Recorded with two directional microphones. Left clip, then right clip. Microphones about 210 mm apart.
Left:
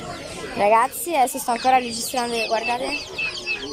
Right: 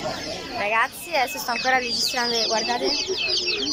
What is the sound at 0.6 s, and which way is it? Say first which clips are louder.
Speech: left 6 dB; 20° left (ahead or behind).